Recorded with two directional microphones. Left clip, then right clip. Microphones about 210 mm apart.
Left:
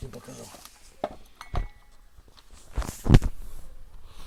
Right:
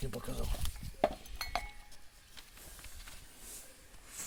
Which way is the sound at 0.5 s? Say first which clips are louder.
Right 1 dB; 10° right (ahead or behind).